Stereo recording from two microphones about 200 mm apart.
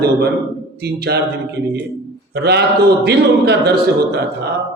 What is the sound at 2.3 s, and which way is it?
A man's voice, 55° right (ahead or behind).